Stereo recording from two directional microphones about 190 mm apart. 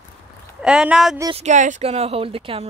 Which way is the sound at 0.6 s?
5° right (ahead or behind).